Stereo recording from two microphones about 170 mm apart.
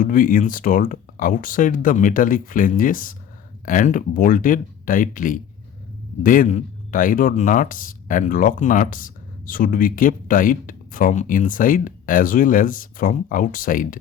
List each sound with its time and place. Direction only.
0.0 s speech: 55° left (ahead or behind)